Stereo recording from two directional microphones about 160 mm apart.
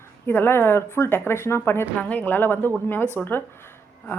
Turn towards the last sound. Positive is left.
turn(degrees=10)  # may be behind; listen again after turning